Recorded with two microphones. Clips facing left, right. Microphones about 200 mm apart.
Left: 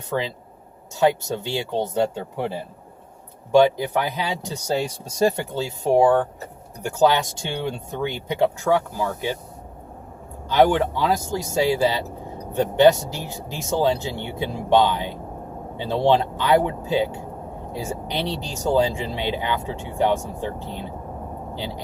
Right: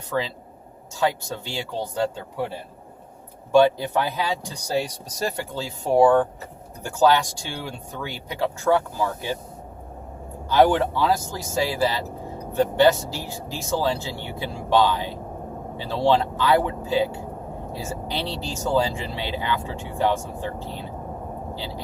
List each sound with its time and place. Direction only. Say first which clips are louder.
0.1 s speech: left 1 dB; 20° left (ahead or behind)
3.5 s speech: left 1 dB; 15° left (ahead or behind)
10.5 s speech: even; 15° left (ahead or behind)